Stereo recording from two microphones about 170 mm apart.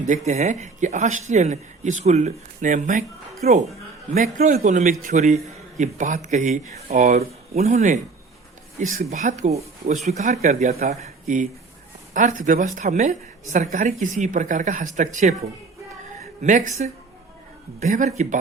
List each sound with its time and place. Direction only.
0.3 s speech: 45° right (ahead or behind)
4.1 s speech: 55° right (ahead or behind)
16.4 s speech: 50° right (ahead or behind)